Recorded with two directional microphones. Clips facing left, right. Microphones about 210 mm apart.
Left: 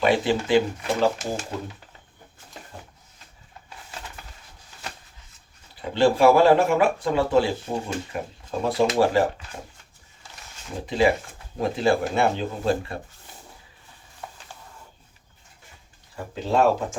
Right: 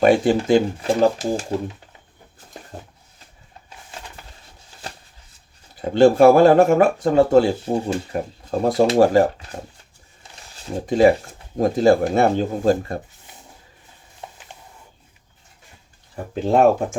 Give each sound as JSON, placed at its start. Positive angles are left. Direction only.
{"t": 0.0, "sound": "speech", "side_deg": -45}
{"t": 5.8, "sound": "speech", "side_deg": -45}
{"t": 10.5, "sound": "speech", "side_deg": -40}
{"t": 14.2, "sound": "a sound", "side_deg": -20}
{"t": 16.1, "sound": "speech", "side_deg": -50}